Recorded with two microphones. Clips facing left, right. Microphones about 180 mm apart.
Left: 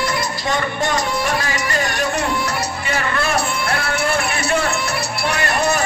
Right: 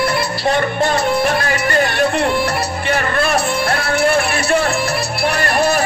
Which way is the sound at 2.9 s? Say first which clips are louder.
Right 4 dB; 55° right (ahead or behind).